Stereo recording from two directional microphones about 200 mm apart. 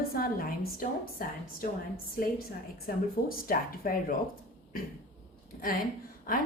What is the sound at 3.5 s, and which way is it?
Speech, 45° left (ahead or behind).